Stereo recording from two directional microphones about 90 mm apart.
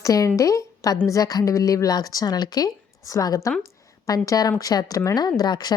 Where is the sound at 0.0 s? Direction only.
40° left (ahead or behind).